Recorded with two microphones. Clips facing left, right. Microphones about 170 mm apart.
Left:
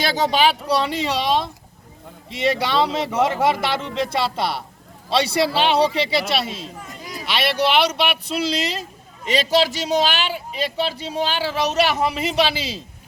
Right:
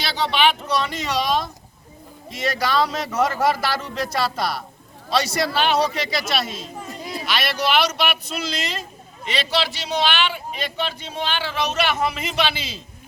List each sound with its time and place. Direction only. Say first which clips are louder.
0.0 s speech: left 2 dB; 45° left (ahead or behind); by 6.7 s 30° left (ahead or behind)
6.7 s chatter: right 4 dB; 25° right (ahead or behind)
7.3 s speech: left 3 dB; 30° left (ahead or behind)